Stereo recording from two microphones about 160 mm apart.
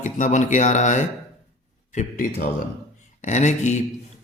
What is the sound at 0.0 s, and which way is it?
Speech, 50° left (ahead or behind).